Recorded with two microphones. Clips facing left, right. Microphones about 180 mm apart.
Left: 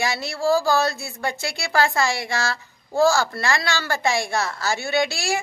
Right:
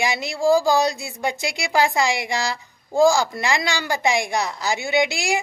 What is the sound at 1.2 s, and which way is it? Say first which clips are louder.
A woman's voice: right 2 dB; 15° right (ahead or behind).